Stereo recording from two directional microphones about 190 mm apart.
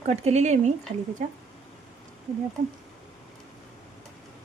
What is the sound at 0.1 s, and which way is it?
Speech, 35° right (ahead or behind).